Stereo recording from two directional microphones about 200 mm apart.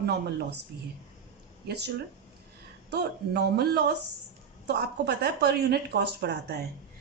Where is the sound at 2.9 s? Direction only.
55° right (ahead or behind).